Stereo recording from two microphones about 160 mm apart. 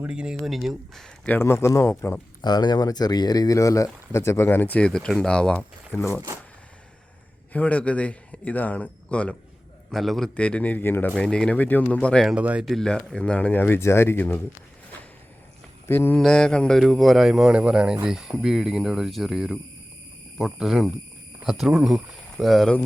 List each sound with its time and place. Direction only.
0.0 s speech: 5° right (ahead or behind); by 2.2 s 10° left (ahead or behind)
2.4 s speech: 25° left (ahead or behind); by 6.0 s 5° left (ahead or behind)
7.5 s speech: 10° left (ahead or behind)
12.3 s speech: 10° right (ahead or behind); by 14.4 s 10° left (ahead or behind)
15.9 s speech: 15° left (ahead or behind)